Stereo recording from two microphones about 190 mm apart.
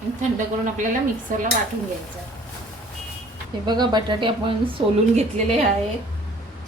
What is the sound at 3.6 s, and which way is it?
A woman's voice, 25° right (ahead or behind).